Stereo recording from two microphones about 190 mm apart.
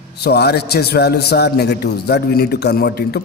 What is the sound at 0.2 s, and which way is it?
A man's voice, 60° left (ahead or behind).